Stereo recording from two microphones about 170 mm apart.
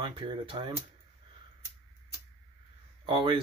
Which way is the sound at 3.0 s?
30° right (ahead or behind).